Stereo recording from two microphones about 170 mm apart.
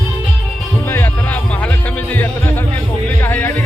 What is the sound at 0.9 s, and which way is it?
Music, 15° left (ahead or behind).